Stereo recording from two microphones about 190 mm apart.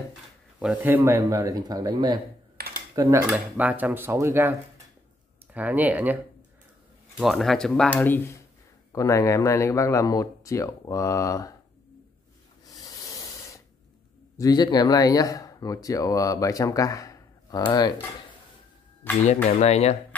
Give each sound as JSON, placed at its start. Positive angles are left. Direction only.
{"t": 0.6, "sound": "speech", "side_deg": -10}
{"t": 2.5, "sound": "computer keyboard", "side_deg": -55}
{"t": 3.0, "sound": "speech", "side_deg": -15}
{"t": 7.2, "sound": "speech", "side_deg": 0}
{"t": 12.7, "sound": "a sound", "side_deg": 20}
{"t": 14.3, "sound": "speech", "side_deg": 20}
{"t": 19.2, "sound": "speech", "side_deg": 35}